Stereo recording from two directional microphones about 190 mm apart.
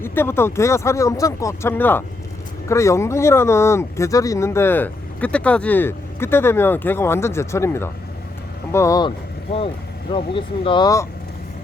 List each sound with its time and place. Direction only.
0.0 s speech: 10° left (ahead or behind)